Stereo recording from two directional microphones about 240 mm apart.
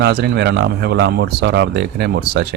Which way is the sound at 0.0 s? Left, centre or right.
Right.